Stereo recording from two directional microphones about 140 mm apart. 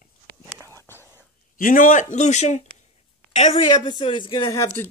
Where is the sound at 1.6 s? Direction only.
75° left (ahead or behind); by 2.6 s 55° left (ahead or behind).